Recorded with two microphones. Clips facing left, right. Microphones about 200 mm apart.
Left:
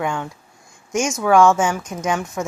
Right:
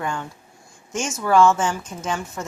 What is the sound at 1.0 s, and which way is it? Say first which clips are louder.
Speech: left 3 dB; 80° left.